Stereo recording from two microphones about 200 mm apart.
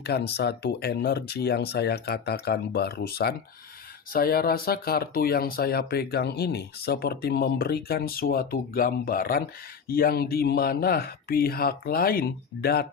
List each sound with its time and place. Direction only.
0.0 s speech: 55° left (ahead or behind)